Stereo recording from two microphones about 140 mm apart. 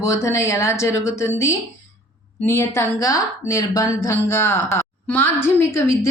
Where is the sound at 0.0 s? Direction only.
20° left (ahead or behind).